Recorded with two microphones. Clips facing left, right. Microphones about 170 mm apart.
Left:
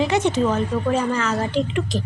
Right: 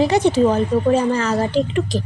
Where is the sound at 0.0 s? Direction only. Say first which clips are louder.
Right 4 dB; 35° right (ahead or behind).